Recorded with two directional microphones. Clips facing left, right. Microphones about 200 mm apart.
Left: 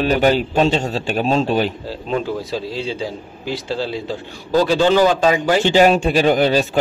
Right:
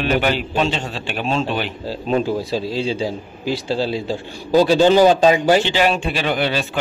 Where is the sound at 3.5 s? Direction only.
10° right (ahead or behind).